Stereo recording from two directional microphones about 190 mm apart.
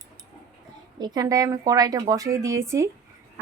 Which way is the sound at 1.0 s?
20° right (ahead or behind).